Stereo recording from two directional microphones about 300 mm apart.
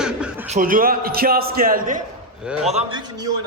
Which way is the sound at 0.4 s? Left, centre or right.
Right.